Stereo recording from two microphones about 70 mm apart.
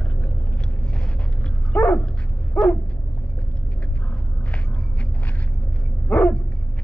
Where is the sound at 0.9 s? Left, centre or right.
Centre.